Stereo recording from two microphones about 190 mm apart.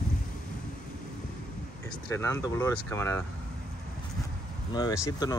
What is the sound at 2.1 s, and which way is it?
Speech, 15° left (ahead or behind).